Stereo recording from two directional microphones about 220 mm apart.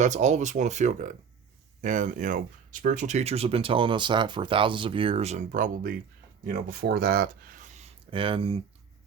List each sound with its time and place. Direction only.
0.0 s speech: 30° right (ahead or behind)
6.4 s speech: 45° right (ahead or behind); by 8.6 s 25° right (ahead or behind)